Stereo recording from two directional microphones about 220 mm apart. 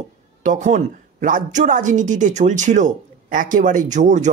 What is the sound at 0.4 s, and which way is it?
Speech, 35° right (ahead or behind).